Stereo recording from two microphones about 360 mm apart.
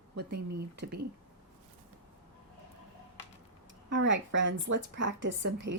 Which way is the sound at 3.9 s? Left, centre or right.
Right.